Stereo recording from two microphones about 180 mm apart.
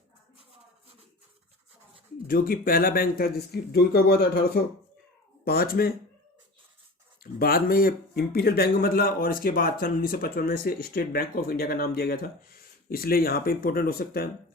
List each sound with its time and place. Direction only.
2.2 s a man's voice: 50° left (ahead or behind)
7.3 s a man's voice: 55° left (ahead or behind)